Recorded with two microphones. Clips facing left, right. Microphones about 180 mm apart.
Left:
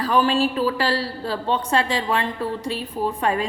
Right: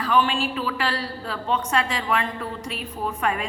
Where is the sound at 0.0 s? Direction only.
40° left (ahead or behind).